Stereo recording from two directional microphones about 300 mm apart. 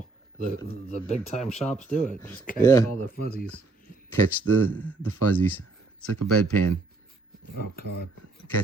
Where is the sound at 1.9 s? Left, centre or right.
Centre.